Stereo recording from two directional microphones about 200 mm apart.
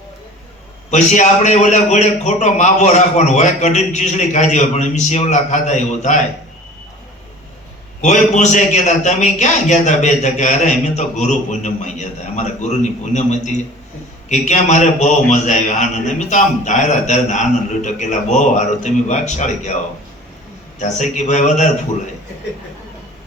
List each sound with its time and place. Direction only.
0.9 s a man's voice: 35° left (ahead or behind)
8.0 s a man's voice: 35° left (ahead or behind)
20.7 s a man's voice: 35° left (ahead or behind)